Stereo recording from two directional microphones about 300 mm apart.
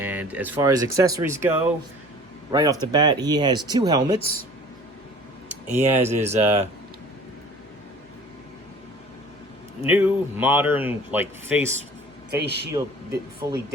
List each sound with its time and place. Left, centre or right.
0.0 s a man's voice: centre
6.2 s speech: right
9.8 s a man's voice: centre
12.3 s speech: right
12.7 s a man's voice: centre